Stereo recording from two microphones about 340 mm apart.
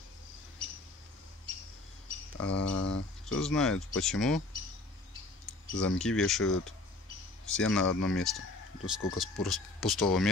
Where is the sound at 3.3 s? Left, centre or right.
Centre.